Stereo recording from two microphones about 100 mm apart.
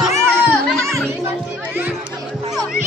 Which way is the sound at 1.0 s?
20° right (ahead or behind).